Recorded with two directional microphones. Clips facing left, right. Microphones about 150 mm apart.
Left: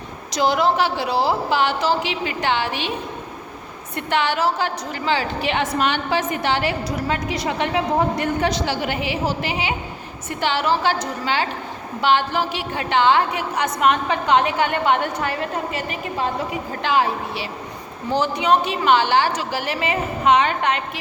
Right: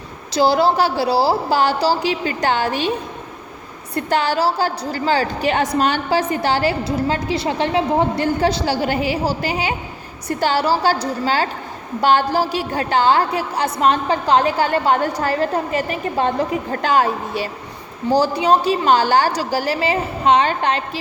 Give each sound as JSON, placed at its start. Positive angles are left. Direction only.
{"t": 0.3, "sound": "a woman's voice", "side_deg": -35}
{"t": 3.9, "sound": "a woman's voice", "side_deg": -35}
{"t": 18.1, "sound": "a woman's voice", "side_deg": -35}